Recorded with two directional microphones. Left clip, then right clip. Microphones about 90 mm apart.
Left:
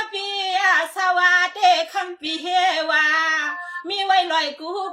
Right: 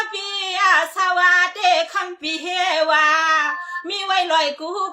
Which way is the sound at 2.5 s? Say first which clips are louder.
Right 1 dB; 30° right (ahead or behind).